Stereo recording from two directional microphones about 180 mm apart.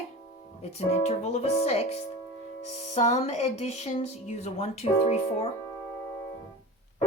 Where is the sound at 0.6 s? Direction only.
35° left (ahead or behind).